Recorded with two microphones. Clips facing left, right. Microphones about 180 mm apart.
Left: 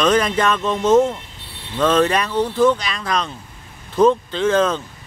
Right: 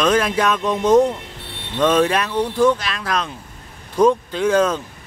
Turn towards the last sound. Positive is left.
turn(degrees=-10)  # may be behind; listen again after turning